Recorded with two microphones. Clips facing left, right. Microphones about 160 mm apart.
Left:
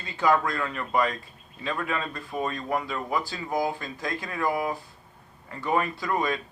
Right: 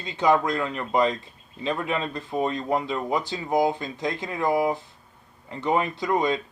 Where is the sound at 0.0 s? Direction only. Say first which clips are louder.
Right 2 dB; 20° right (ahead or behind).